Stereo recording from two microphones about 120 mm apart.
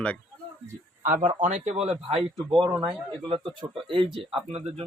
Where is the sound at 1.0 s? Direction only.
90° right; by 2.2 s 60° right (ahead or behind).